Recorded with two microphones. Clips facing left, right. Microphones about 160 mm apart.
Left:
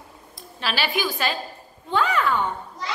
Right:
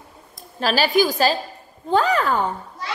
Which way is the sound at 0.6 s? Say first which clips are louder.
Right 8 dB; 40° right (ahead or behind).